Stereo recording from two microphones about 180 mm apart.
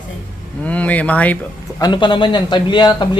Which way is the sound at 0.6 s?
10° left (ahead or behind).